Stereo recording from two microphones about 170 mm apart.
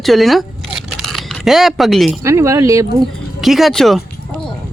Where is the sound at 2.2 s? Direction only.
15° right (ahead or behind).